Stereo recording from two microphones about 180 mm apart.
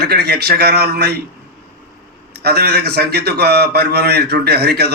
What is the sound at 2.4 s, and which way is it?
A man's voice, 65° right (ahead or behind).